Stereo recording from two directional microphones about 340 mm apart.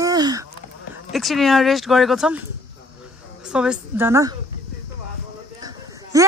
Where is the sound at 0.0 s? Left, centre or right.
Centre.